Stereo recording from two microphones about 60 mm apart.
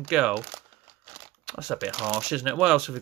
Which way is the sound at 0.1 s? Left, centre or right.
Centre.